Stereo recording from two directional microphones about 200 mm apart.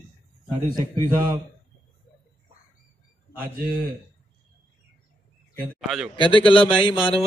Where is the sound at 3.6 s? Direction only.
50° right (ahead or behind).